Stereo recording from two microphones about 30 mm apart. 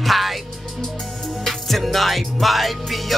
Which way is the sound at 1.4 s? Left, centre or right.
Centre.